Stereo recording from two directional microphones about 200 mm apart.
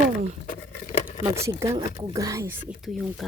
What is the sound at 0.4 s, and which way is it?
Patter, 40° left (ahead or behind).